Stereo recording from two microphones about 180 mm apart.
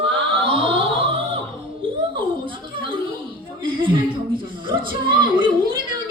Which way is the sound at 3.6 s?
30° right (ahead or behind).